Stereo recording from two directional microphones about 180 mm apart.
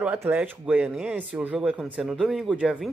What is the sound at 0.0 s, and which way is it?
Speech, 10° right (ahead or behind).